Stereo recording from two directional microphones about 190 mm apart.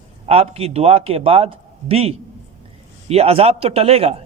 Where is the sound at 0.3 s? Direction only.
30° right (ahead or behind).